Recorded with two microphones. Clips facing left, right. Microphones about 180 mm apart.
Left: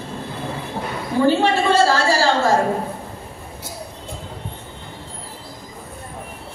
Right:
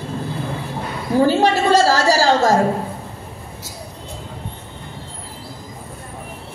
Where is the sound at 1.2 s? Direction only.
40° right (ahead or behind).